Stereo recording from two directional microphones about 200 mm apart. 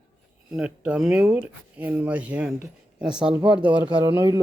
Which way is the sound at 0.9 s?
5° right (ahead or behind).